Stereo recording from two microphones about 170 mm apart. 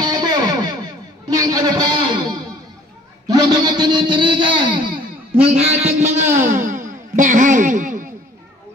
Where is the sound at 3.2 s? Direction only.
25° right (ahead or behind).